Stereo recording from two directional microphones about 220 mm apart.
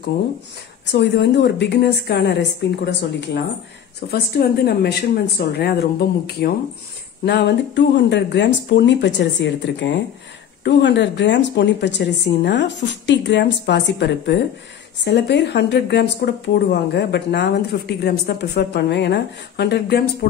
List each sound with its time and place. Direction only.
0.9 s speech: 50° left (ahead or behind)